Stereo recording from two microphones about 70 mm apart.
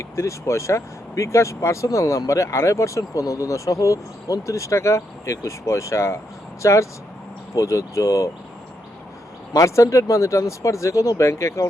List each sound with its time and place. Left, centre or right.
0.0 s speech: left
9.5 s speech: left